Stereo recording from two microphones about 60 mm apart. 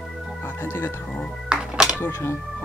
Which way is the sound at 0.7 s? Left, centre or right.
Left.